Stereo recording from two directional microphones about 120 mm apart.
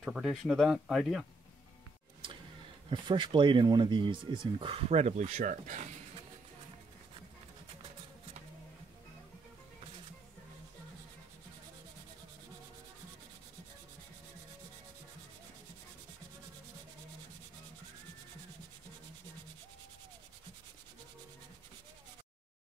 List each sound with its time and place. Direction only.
0.0 s speech: centre (ahead or behind)
2.9 s speech: 40° right (ahead or behind); by 5.9 s 90° right